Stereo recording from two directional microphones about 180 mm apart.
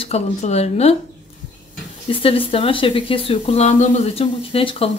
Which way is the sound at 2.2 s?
30° left (ahead or behind).